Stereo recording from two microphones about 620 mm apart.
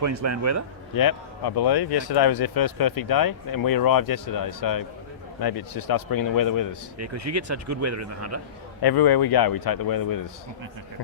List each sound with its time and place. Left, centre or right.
0.0 s speech: right
0.9 s speech: left
7.0 s speech: right
8.8 s speech: left